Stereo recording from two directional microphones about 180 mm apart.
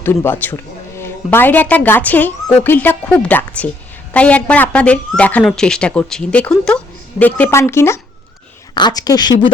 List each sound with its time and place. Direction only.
0.0 s a woman's voice: 15° left (ahead or behind)